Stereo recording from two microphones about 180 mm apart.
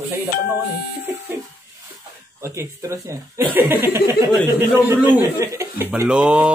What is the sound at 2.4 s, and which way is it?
Speech, 15° right (ahead or behind).